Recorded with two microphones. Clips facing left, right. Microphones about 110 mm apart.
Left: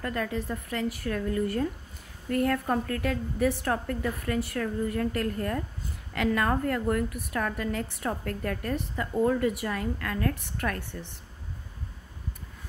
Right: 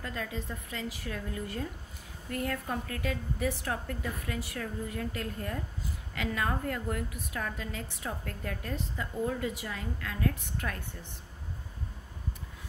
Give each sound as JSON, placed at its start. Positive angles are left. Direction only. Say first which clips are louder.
{"t": 0.0, "sound": "a woman's voice", "louder": "left 7 dB", "side_deg": 60}